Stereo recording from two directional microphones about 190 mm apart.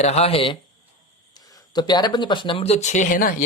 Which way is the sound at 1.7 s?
20° left (ahead or behind).